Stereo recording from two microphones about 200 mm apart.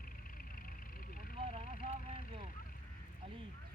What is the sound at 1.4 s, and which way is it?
Vehicle, 30° right (ahead or behind).